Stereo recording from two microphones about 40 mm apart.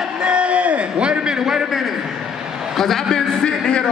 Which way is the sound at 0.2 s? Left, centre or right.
Right.